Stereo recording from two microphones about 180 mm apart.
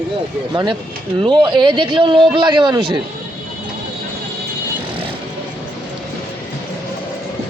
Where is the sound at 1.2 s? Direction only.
25° right (ahead or behind).